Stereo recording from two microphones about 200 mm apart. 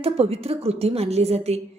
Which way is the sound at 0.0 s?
30° right (ahead or behind).